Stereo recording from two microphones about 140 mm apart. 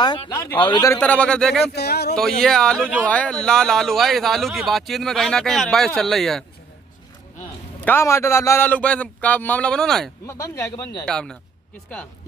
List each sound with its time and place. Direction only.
0.0 s speech: 30° left (ahead or behind)
0.9 s a man's voice: 10° left (ahead or behind)
7.8 s a man's voice: 15° left (ahead or behind)
10.2 s speech: 20° left (ahead or behind)
11.1 s speech: 5° left (ahead or behind)